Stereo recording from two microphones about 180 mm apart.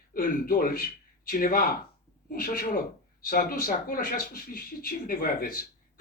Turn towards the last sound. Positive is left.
turn(degrees=55)  # may be behind; listen again after turning